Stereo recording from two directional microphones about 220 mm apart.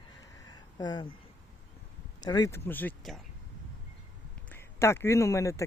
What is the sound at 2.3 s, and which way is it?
Speech, 15° left (ahead or behind).